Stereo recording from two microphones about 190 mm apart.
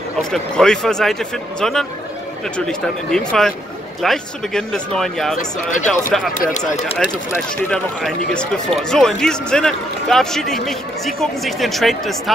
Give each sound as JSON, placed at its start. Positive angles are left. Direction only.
{"t": 0.3, "sound": "speech", "side_deg": 5}
{"t": 5.4, "sound": "speech", "side_deg": 40}
{"t": 5.9, "sound": "speech", "side_deg": 5}
{"t": 7.6, "sound": "speech", "side_deg": 5}